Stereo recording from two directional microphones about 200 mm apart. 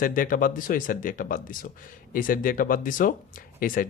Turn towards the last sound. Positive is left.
turn(degrees=45)  # may be behind; listen again after turning